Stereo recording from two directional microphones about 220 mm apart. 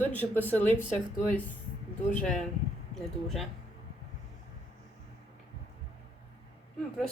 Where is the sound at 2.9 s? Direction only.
Centre (ahead or behind).